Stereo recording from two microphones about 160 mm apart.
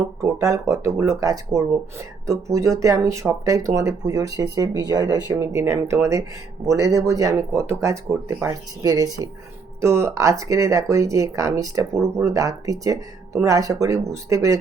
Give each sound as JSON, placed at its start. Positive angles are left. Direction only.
{"t": 0.2, "sound": "speech", "side_deg": -20}